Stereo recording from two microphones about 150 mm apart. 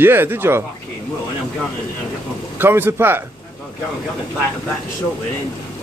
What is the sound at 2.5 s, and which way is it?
Speech, 15° right (ahead or behind).